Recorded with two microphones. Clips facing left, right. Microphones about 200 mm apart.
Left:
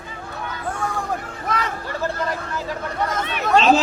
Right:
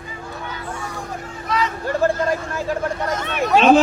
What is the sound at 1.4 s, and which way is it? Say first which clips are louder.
Speech: right 4 dB; 55° left (ahead or behind).